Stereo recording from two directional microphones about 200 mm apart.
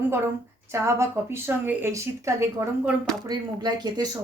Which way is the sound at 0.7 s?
15° right (ahead or behind).